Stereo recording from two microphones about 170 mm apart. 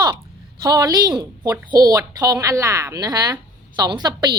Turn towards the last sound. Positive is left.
turn(degrees=-25)  # may be behind; listen again after turning